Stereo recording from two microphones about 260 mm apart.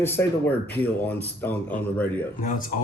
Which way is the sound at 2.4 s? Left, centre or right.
Left.